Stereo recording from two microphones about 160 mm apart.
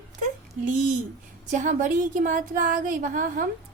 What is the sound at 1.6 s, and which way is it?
Speech, 55° right (ahead or behind).